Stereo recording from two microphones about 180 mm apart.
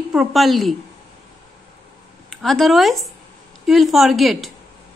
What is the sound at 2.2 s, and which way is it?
A woman's voice, centre (ahead or behind).